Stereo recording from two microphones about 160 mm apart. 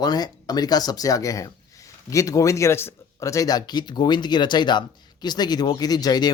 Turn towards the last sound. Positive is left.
turn(degrees=25)  # may be behind; listen again after turning